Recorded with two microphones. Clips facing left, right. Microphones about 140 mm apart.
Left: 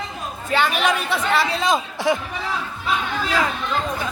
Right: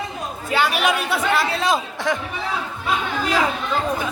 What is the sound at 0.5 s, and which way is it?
A man's voice, 5° right (ahead or behind).